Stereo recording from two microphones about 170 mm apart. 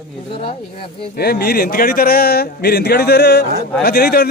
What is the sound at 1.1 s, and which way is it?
Speech, 65° left (ahead or behind).